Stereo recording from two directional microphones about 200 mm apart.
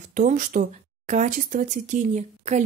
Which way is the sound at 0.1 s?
40° right (ahead or behind).